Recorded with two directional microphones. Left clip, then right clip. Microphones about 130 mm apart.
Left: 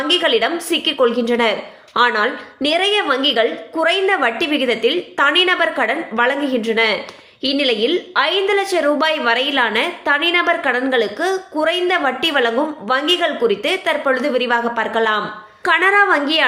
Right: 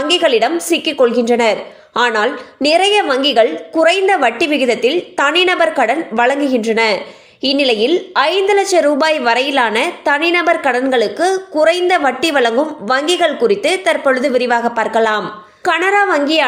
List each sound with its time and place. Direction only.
0.0 s a woman's voice: 35° right (ahead or behind)
15.6 s a woman's voice: 30° right (ahead or behind)